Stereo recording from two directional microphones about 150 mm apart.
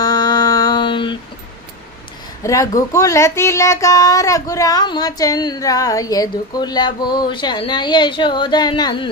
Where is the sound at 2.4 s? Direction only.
20° left (ahead or behind).